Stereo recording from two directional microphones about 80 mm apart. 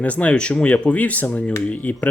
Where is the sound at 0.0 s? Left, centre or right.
Centre.